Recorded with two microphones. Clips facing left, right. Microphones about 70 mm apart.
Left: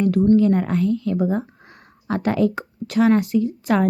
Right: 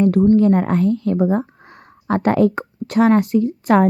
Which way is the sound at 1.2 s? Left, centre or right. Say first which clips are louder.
Right 6 dB; right.